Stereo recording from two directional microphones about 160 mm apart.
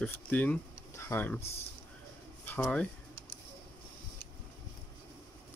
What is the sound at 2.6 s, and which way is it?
Speech, 5° left (ahead or behind).